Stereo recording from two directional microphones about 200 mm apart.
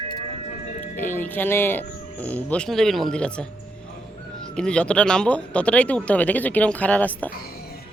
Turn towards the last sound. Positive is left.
turn(degrees=10)  # may be behind; listen again after turning